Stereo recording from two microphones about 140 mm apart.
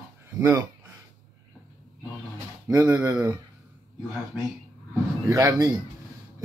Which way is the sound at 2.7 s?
20° right (ahead or behind).